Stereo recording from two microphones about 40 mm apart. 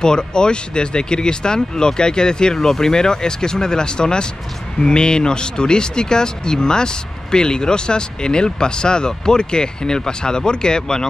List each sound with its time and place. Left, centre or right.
0.0 s speech: centre